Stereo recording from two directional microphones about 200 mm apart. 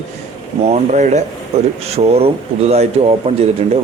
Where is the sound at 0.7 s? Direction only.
35° right (ahead or behind).